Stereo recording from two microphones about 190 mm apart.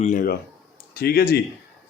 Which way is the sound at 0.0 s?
45° left (ahead or behind).